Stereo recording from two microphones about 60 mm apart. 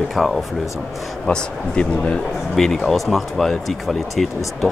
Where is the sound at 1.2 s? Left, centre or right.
Centre.